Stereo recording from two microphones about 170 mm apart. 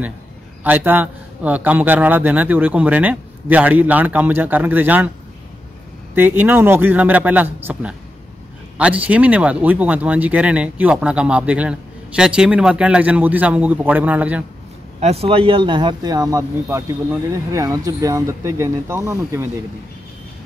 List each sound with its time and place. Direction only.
0.7 s speech: 10° right (ahead or behind)
6.1 s speech: 10° right (ahead or behind)
15.0 s speech: 35° right (ahead or behind); by 19.4 s 15° right (ahead or behind)